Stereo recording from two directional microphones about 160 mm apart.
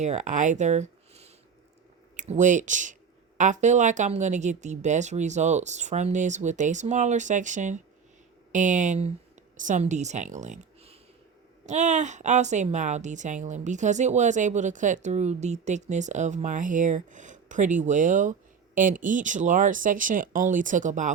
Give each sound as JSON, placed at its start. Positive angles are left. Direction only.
{"t": 0.0, "sound": "a woman's voice", "side_deg": -45}